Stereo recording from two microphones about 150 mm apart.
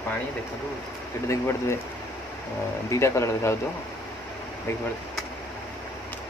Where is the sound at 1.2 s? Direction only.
15° left (ahead or behind).